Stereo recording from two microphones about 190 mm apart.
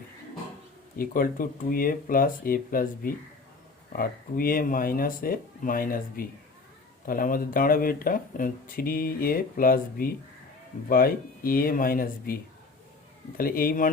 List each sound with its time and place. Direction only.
0.9 s speech: 50° left (ahead or behind)